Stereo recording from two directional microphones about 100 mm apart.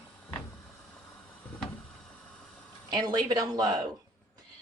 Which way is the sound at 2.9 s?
45° right (ahead or behind).